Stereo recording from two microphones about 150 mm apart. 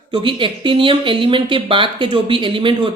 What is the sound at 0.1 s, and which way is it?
Speech, 35° right (ahead or behind).